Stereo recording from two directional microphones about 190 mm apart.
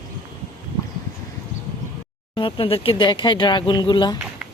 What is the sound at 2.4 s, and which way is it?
Speech, 25° left (ahead or behind).